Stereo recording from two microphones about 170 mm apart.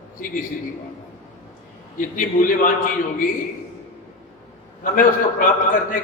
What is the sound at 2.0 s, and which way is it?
Speech, 50° left (ahead or behind).